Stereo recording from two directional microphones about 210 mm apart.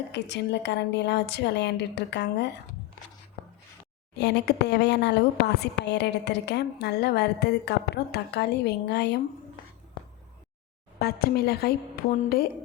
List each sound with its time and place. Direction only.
0.1 s a woman's voice: 55° left (ahead or behind)
4.1 s speech: 50° left (ahead or behind)
11.0 s speech: 50° left (ahead or behind)